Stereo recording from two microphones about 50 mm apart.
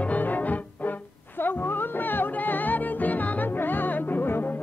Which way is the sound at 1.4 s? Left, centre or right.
Left.